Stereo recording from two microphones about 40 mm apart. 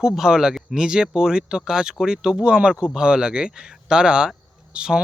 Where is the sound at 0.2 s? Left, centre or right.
Centre.